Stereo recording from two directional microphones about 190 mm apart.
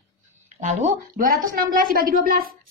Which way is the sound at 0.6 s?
45° right (ahead or behind).